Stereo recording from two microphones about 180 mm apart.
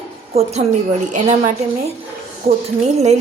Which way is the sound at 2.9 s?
40° right (ahead or behind).